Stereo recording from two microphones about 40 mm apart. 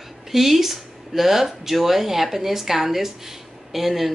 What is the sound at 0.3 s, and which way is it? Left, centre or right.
Speech, centre.